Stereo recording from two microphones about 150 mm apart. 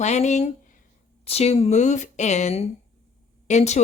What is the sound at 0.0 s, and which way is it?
Speech, 50° left (ahead or behind).